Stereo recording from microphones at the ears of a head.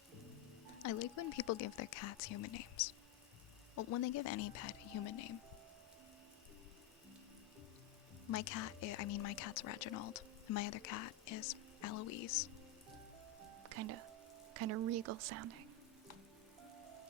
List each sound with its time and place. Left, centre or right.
0.8 s speech: left
8.3 s speech: left
13.4 s music: right
14.5 s speech: right
16.7 s rain on surface: right